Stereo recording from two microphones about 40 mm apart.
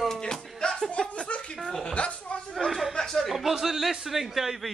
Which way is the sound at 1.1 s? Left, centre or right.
Left.